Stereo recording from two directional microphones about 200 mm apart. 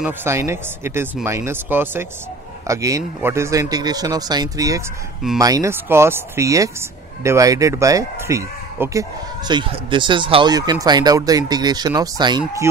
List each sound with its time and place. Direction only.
0.0 s speech: 10° right (ahead or behind)